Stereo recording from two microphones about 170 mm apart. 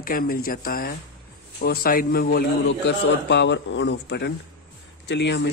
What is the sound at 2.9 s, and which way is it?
A man's voice, 90° left.